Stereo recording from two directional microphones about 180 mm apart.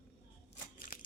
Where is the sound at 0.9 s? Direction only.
50° left (ahead or behind).